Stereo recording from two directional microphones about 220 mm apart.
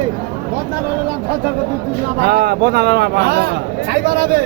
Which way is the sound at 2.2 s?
45° right (ahead or behind).